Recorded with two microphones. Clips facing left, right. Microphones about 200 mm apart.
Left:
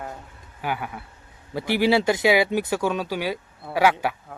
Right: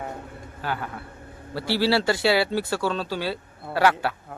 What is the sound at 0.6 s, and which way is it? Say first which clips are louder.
Speech: left 1 dB; 15° left (ahead or behind).